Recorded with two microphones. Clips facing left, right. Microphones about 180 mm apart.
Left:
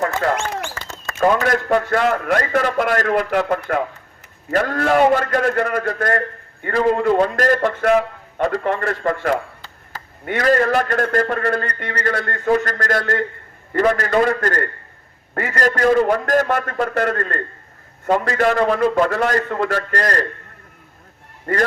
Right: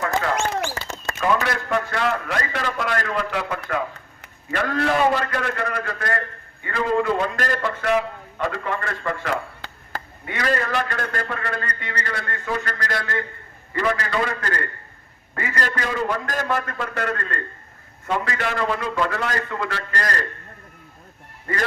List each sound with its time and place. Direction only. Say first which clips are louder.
1.2 s a man's voice: left 6 dB; 45° left (ahead or behind)